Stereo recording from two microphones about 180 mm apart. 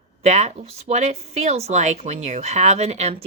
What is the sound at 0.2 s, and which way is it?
A woman's voice, 40° right (ahead or behind).